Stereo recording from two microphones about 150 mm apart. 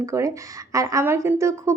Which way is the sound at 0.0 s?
20° right (ahead or behind).